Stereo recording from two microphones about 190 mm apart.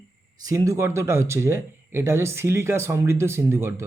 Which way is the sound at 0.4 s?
15° right (ahead or behind).